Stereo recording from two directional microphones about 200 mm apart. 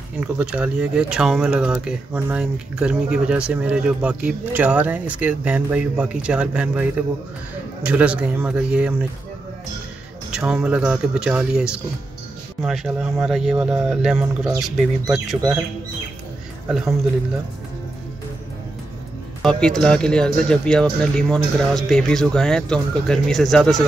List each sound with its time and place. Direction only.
0.2 s speech: 5° right (ahead or behind)
10.3 s speech: 5° right (ahead or behind)
15.0 s speech: 15° right (ahead or behind)
19.4 s speech: 5° left (ahead or behind)